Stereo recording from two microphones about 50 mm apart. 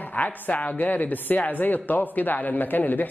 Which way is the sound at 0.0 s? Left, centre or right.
Left.